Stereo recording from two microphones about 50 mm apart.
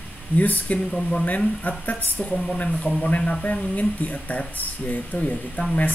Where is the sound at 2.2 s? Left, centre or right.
Centre.